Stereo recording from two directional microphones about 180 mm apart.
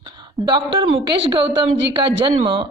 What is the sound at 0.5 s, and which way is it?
A woman's voice, 25° right (ahead or behind).